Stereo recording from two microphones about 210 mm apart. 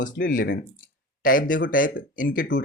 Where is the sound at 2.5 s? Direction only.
60° left (ahead or behind).